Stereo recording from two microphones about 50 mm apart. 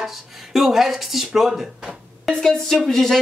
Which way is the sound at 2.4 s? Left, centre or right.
Centre.